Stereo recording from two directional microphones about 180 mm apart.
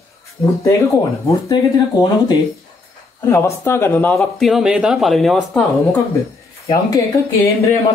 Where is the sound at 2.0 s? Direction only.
25° left (ahead or behind); by 5.6 s centre (ahead or behind).